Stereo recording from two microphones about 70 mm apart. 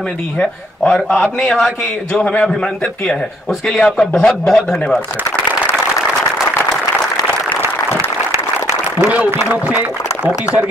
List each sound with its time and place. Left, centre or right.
0.4 s speech: centre
8.3 s applause: right
9.1 s a man's voice: right